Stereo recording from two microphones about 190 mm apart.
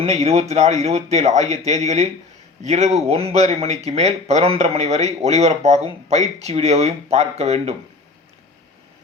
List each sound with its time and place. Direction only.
0.0 s speech: 35° right (ahead or behind)